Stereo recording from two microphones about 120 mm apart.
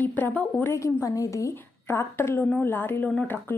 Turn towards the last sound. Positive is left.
turn(degrees=15)  # may be behind; listen again after turning